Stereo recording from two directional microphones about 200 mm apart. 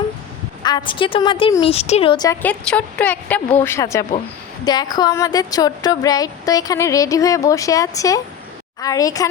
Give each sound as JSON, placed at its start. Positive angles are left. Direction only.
{"t": 0.6, "sound": "a woman's voice", "side_deg": 20}